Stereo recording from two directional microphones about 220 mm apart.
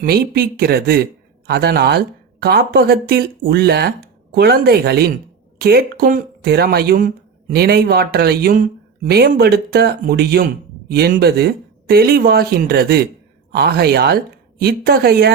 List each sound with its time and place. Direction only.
0.0 s speech: 45° right (ahead or behind)